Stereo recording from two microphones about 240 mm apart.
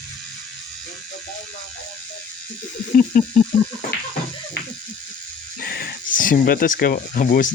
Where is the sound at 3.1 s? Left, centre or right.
Left.